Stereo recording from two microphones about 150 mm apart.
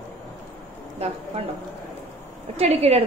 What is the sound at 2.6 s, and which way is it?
Speech, 40° right (ahead or behind).